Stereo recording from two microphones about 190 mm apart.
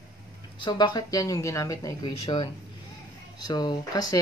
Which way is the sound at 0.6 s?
25° left (ahead or behind).